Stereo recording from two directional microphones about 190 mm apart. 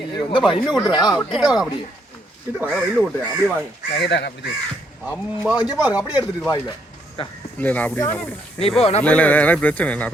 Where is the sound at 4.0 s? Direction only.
60° left (ahead or behind).